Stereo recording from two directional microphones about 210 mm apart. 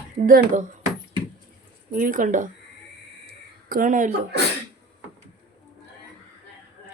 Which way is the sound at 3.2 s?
45° right (ahead or behind).